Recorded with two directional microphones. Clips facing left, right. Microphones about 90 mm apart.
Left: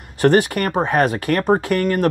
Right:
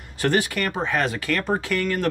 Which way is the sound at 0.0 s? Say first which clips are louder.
Left 7 dB; 50° left (ahead or behind).